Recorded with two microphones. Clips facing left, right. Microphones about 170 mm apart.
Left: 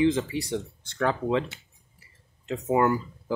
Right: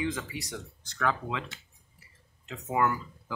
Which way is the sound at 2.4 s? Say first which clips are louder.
Left 6 dB; 30° left (ahead or behind).